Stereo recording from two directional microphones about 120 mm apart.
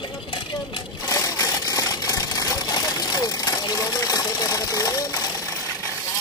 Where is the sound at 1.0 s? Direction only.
30° left (ahead or behind).